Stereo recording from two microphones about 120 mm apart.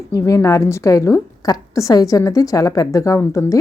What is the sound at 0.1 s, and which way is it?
A woman's voice, 30° left (ahead or behind).